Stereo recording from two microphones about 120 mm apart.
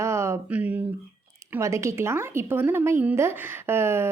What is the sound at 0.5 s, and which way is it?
Speech, 10° right (ahead or behind).